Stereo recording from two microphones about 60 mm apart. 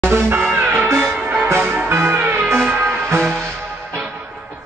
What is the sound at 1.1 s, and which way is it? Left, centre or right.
Music, centre.